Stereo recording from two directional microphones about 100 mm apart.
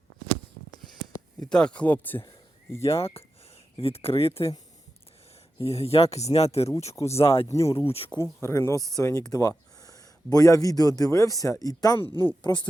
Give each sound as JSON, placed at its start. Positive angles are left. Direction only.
{"t": 1.5, "sound": "speech", "side_deg": 10}
{"t": 2.9, "sound": "speech", "side_deg": 75}
{"t": 5.5, "sound": "speech", "side_deg": 85}
{"t": 6.9, "sound": "speech", "side_deg": 30}
{"t": 7.8, "sound": "speech", "side_deg": 75}
{"t": 8.2, "sound": "speech", "side_deg": 25}
{"t": 12.1, "sound": "speech", "side_deg": 50}